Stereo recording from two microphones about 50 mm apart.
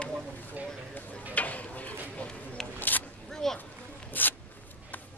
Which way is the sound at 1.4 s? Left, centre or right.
Left.